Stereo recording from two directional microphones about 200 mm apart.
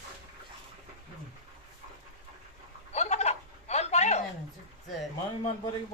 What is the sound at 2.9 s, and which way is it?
Telephone, 35° left (ahead or behind).